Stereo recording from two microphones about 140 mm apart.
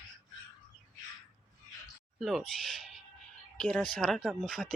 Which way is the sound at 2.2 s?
Centre (ahead or behind).